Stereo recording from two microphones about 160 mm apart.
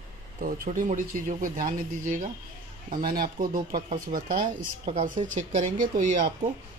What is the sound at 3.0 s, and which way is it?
Speech, 65° right (ahead or behind).